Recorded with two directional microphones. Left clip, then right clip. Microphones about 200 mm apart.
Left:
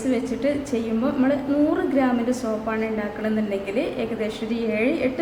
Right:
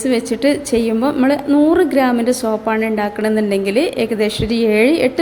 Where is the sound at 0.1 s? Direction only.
45° right (ahead or behind).